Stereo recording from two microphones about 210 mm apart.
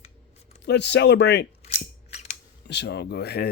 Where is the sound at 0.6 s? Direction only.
55° left (ahead or behind).